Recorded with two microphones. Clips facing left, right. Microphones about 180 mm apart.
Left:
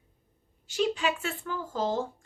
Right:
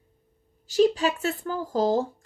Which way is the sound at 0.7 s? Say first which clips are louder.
Right 7 dB; 40° right (ahead or behind).